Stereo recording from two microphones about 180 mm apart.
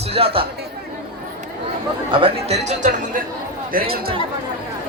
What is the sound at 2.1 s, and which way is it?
Speech, 30° right (ahead or behind).